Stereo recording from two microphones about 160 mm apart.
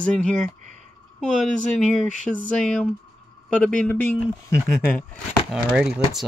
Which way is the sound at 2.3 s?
5° left (ahead or behind).